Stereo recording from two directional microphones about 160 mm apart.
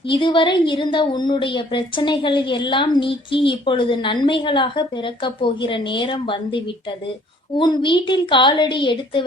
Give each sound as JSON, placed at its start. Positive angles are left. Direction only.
{"t": 0.1, "sound": "a woman's voice", "side_deg": 30}